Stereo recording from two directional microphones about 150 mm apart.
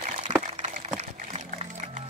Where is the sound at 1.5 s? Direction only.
50° right (ahead or behind).